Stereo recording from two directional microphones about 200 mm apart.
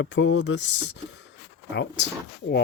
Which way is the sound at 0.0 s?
65° left (ahead or behind).